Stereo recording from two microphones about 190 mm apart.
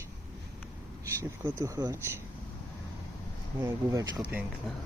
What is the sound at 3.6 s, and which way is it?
Speech, 15° right (ahead or behind).